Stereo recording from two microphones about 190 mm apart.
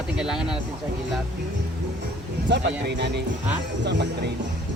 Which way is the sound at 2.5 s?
65° right (ahead or behind).